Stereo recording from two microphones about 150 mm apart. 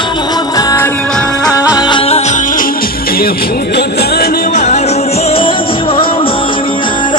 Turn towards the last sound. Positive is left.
turn(degrees=35)  # may be behind; listen again after turning